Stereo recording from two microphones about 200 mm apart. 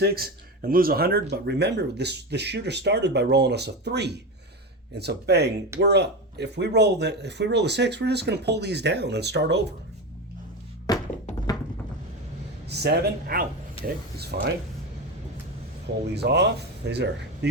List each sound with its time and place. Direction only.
0.6 s speech: 45° right (ahead or behind)
10.9 s music: 20° left (ahead or behind)
12.6 s speech: 55° right (ahead or behind)
16.1 s speech: 55° right (ahead or behind)